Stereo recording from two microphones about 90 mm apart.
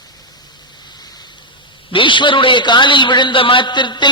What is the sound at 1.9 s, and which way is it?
A man's voice, 65° left (ahead or behind).